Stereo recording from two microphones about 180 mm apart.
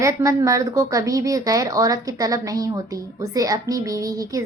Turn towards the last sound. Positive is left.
turn(degrees=-20)  # may be behind; listen again after turning